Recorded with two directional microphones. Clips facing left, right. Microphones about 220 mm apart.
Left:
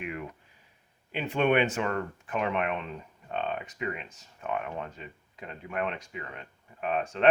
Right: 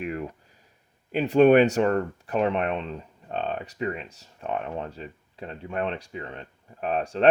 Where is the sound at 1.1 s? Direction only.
40° right (ahead or behind).